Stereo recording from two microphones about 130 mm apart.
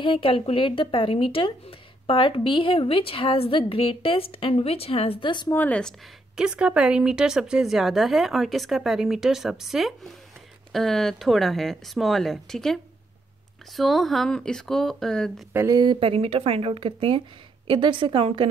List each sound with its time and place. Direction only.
0.0 s speech: 45° left (ahead or behind)
5.5 s speech: 10° left (ahead or behind)
6.3 s a woman's voice: 5° right (ahead or behind)
15.5 s speech: 25° right (ahead or behind)
15.8 s a woman's voice: 40° right (ahead or behind)